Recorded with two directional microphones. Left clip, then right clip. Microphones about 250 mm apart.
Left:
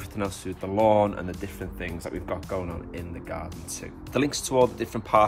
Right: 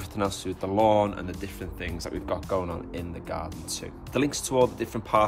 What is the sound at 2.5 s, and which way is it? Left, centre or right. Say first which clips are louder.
Speech: right 3 dB; centre.